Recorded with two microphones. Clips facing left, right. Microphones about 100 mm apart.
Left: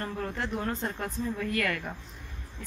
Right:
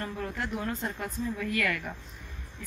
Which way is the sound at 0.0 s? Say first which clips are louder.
Left 1 dB; 35° left (ahead or behind).